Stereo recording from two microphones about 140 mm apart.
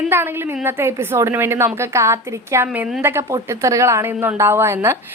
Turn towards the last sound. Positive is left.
turn(degrees=-20)  # may be behind; listen again after turning